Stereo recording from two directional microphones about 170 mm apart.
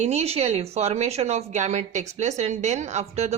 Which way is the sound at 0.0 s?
40° right (ahead or behind).